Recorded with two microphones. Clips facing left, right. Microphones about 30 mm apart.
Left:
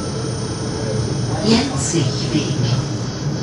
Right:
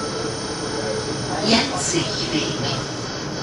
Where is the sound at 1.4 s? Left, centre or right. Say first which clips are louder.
Left 2 dB; centre.